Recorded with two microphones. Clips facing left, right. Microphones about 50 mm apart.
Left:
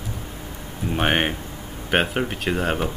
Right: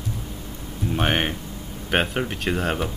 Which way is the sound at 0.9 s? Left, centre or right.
Centre.